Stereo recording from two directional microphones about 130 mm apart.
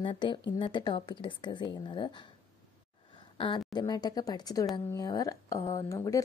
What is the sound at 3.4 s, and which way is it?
A woman's voice, 40° left (ahead or behind).